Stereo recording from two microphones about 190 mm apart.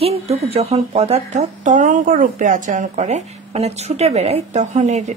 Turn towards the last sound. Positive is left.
turn(degrees=-40)  # may be behind; listen again after turning